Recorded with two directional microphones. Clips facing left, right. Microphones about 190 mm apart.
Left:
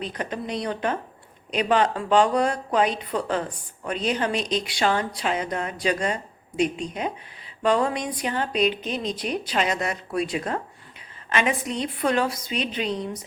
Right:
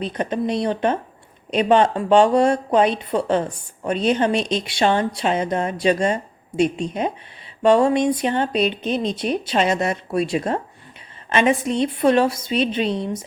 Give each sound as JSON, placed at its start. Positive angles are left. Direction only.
{"t": 0.1, "sound": "speech", "side_deg": -25}